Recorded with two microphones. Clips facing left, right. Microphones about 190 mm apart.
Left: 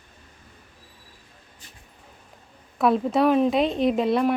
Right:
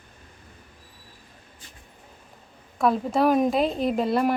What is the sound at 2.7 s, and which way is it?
A woman's voice, centre (ahead or behind).